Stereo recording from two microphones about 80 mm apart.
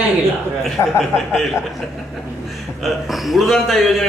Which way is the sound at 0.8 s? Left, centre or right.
Left.